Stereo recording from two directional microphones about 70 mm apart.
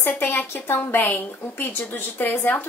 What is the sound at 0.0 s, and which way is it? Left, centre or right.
A woman's voice, left.